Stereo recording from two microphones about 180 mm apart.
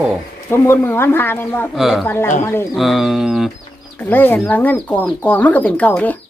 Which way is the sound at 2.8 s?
Centre (ahead or behind).